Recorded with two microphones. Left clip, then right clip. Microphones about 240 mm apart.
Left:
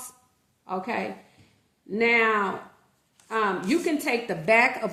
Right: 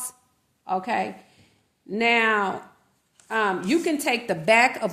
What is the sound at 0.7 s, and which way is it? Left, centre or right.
A woman's voice, right.